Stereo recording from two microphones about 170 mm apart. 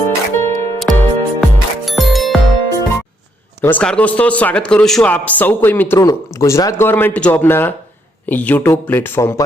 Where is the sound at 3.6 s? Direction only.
10° left (ahead or behind).